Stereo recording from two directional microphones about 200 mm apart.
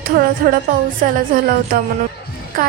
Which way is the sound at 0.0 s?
45° right (ahead or behind).